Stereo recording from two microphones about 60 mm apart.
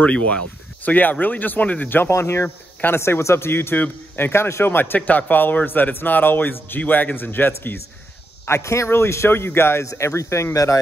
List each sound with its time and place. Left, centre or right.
0.0 s speech: left
2.1 s a man's voice: left
8.5 s a man's voice: left
9.8 s speech: left